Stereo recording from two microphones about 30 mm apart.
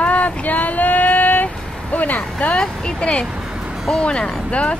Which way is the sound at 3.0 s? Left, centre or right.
Left.